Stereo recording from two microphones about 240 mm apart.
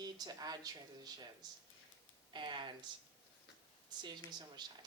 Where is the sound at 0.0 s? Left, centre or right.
Centre.